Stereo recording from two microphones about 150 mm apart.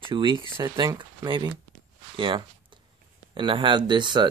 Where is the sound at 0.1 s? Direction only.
30° right (ahead or behind).